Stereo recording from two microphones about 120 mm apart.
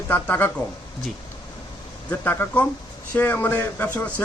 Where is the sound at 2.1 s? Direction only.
20° left (ahead or behind).